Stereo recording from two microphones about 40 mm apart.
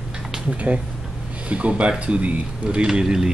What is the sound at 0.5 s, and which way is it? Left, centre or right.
Speech, right.